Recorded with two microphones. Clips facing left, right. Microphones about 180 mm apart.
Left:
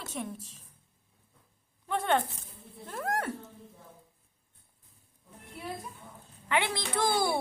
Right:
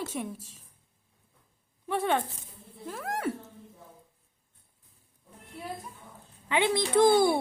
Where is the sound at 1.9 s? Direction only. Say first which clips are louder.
Right 1 dB; 5° right (ahead or behind).